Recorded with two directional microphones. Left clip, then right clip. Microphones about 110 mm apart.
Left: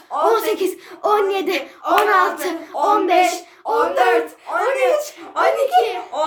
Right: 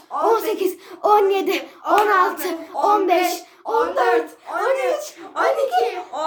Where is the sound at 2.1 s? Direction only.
20° right (ahead or behind).